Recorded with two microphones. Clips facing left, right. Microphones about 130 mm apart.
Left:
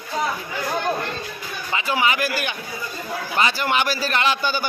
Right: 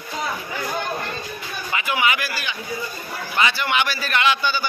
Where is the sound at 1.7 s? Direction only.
30° left (ahead or behind).